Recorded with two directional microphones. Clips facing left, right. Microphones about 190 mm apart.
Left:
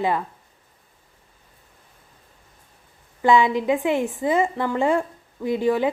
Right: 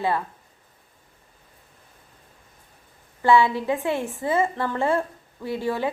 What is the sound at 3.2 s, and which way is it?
Speech, 15° left (ahead or behind).